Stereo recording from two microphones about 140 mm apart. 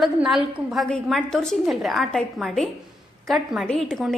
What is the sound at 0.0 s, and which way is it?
A woman's voice, centre (ahead or behind).